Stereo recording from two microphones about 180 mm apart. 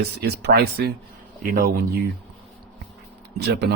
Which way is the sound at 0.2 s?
65° right (ahead or behind).